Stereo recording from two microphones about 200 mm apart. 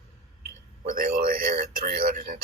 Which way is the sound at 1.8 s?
50° right (ahead or behind).